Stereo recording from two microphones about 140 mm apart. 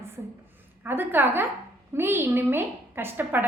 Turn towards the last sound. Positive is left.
turn(degrees=-15)  # may be behind; listen again after turning